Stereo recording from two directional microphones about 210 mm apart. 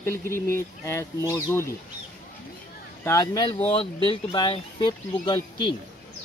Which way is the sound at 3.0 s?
15° left (ahead or behind).